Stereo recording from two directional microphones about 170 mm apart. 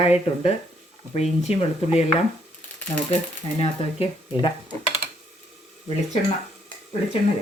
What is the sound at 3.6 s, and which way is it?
Speech, 35° left (ahead or behind).